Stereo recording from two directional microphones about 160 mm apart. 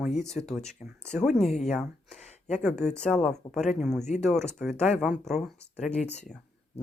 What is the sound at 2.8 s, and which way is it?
Speech, 5° left (ahead or behind).